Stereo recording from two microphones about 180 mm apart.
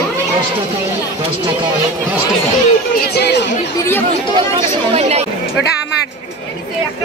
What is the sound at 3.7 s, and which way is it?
Speech, 10° left (ahead or behind).